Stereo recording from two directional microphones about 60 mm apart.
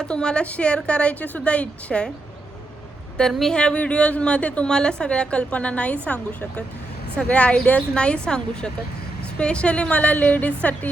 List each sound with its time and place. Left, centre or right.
0.0 s a woman's voice: centre
3.2 s a woman's voice: centre
7.2 s a woman's voice: left